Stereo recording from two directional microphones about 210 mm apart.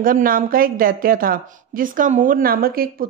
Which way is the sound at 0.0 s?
40° right (ahead or behind).